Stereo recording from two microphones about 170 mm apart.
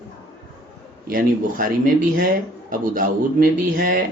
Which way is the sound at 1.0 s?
55° right (ahead or behind).